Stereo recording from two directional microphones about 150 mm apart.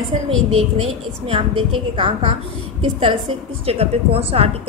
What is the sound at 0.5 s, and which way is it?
A woman's voice, 40° right (ahead or behind).